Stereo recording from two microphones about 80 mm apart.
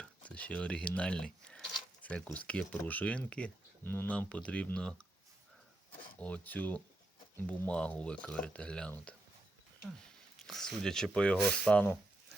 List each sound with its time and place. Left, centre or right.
0.0 s speech: centre
6.1 s speech: centre
9.1 s a sound: centre
10.3 s speech: centre